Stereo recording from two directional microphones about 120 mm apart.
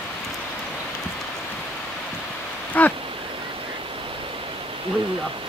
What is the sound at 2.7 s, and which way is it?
Speech, 15° left (ahead or behind).